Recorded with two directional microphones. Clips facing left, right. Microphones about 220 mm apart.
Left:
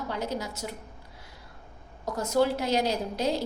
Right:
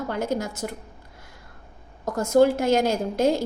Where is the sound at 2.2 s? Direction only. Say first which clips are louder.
Right 7 dB; 50° right (ahead or behind).